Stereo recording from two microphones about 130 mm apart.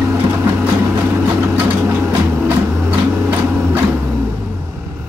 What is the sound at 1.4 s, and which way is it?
Vehicle, 15° right (ahead or behind).